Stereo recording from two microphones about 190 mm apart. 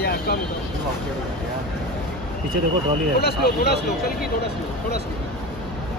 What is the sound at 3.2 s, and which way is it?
Speech, 55° left (ahead or behind).